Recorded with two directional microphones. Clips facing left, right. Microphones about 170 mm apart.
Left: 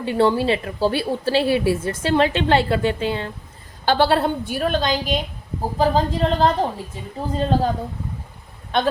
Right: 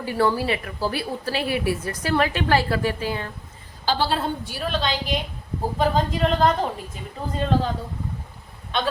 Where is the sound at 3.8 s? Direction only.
60° left (ahead or behind).